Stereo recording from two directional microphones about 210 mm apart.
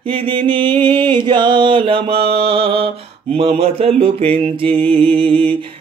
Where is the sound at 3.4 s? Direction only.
30° right (ahead or behind).